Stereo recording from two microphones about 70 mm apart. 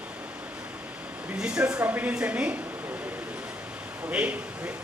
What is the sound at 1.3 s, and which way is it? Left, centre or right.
A man's voice, centre.